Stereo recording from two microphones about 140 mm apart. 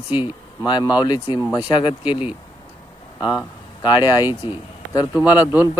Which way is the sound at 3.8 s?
30° left (ahead or behind).